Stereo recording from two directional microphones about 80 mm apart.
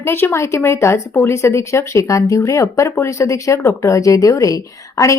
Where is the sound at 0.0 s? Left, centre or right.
Left.